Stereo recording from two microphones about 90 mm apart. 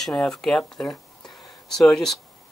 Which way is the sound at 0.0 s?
5° left (ahead or behind).